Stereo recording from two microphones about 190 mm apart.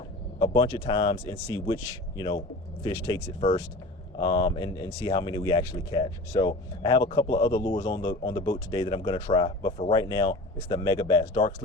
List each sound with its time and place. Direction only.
0.3 s speech: 25° left (ahead or behind)